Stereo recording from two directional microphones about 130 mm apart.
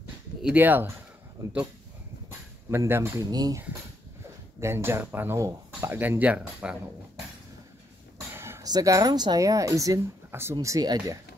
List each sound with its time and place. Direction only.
0.4 s speech: 10° right (ahead or behind)
2.7 s speech: 20° right (ahead or behind)
3.3 s speech: 30° right (ahead or behind); by 6.8 s 10° right (ahead or behind)
8.4 s a sound: 20° right (ahead or behind)
8.6 s speech: 25° right (ahead or behind)